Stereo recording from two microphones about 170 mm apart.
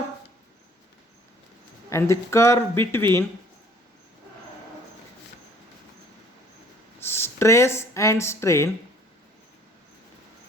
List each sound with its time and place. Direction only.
1.9 s speech: 15° left (ahead or behind)
7.0 s speech: 15° left (ahead or behind)